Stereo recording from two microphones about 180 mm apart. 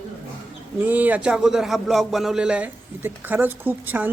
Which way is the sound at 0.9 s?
10° right (ahead or behind).